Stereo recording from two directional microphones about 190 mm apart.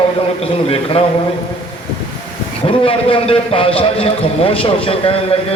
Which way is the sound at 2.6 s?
30° left (ahead or behind).